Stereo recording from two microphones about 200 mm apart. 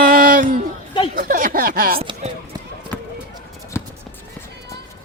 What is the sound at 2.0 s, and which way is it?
Speech, 30° right (ahead or behind).